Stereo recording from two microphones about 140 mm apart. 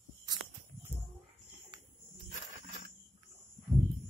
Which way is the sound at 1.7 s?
35° right (ahead or behind).